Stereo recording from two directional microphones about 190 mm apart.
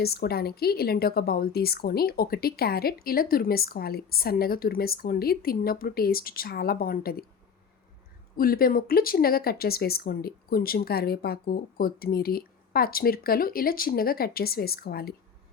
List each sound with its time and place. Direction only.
0.0 s a woman's voice: 55° left (ahead or behind)
8.4 s a woman's voice: 50° left (ahead or behind)